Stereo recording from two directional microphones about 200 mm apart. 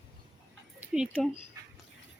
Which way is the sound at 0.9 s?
Centre (ahead or behind).